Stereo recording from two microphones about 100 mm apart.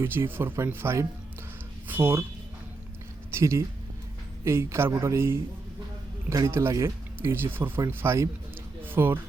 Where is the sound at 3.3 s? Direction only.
30° right (ahead or behind).